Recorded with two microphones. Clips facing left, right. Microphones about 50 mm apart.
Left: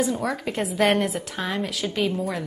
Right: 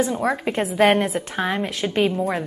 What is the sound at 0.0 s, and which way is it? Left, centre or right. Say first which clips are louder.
Speech: right 3 dB; right.